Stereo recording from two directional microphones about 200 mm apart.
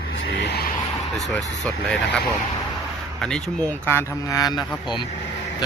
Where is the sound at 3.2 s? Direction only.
5° left (ahead or behind); by 4.6 s 20° left (ahead or behind).